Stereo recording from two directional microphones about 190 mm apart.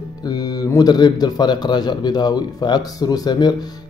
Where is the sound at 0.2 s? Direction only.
20° left (ahead or behind).